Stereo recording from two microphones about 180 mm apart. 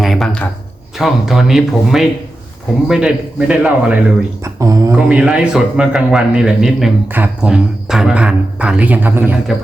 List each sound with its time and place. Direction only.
0.0 s a sound: centre (ahead or behind)
0.9 s a man's voice: centre (ahead or behind)
4.4 s speech: 15° right (ahead or behind)
4.9 s a man's voice: 5° right (ahead or behind)